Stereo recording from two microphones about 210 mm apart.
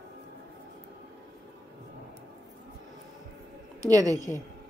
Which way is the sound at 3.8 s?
15° right (ahead or behind).